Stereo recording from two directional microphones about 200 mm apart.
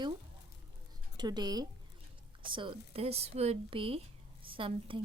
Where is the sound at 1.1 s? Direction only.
20° right (ahead or behind).